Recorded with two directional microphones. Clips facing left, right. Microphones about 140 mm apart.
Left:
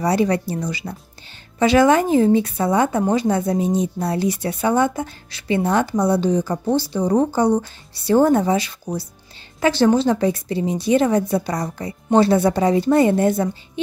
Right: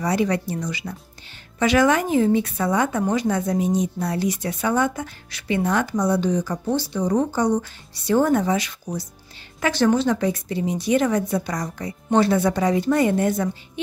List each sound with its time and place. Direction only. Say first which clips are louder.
0.0 s a woman's voice: left 3 dB; 35° left (ahead or behind)